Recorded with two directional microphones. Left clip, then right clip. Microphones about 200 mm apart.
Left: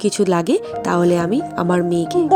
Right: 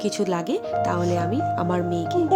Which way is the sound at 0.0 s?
25° left (ahead or behind).